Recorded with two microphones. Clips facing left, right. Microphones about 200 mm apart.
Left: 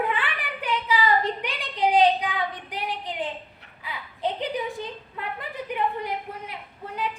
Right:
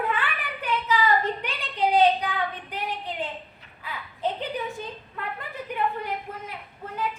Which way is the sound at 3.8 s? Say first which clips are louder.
Even; 15° left (ahead or behind).